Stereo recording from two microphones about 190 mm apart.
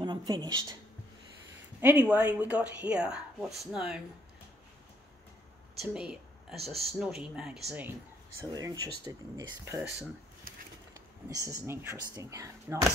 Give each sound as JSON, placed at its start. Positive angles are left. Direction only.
{"t": 0.0, "sound": "speech", "side_deg": -20}
{"t": 1.8, "sound": "speech", "side_deg": -10}
{"t": 5.8, "sound": "speech", "side_deg": 0}
{"t": 8.4, "sound": "speech", "side_deg": -20}
{"t": 10.5, "sound": "a sound", "side_deg": -45}
{"t": 10.9, "sound": "speech", "side_deg": -15}